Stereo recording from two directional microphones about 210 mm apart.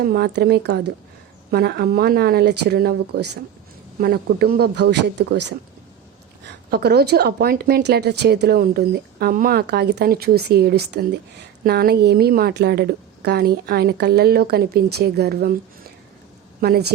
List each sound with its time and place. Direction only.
0.0 s speech: 50° right (ahead or behind)
16.6 s speech: 50° right (ahead or behind)